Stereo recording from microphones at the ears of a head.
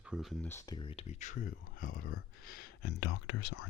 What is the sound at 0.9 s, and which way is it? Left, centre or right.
Speech, left.